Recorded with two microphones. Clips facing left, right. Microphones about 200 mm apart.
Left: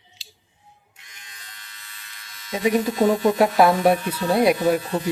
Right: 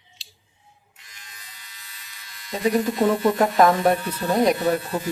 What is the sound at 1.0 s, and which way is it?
Electric shaver, centre (ahead or behind).